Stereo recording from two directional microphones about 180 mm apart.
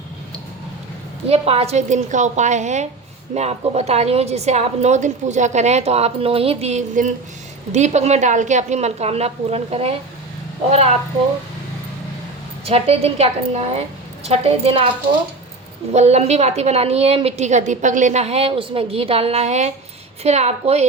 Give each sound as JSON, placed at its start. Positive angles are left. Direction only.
{"t": 1.3, "sound": "a woman's voice", "side_deg": -35}
{"t": 12.6, "sound": "a woman's voice", "side_deg": -35}
{"t": 15.9, "sound": "a woman's voice", "side_deg": -35}